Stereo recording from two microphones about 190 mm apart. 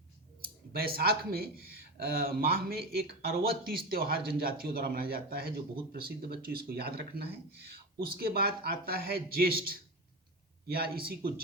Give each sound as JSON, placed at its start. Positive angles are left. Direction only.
{"t": 0.9, "sound": "speech", "side_deg": -55}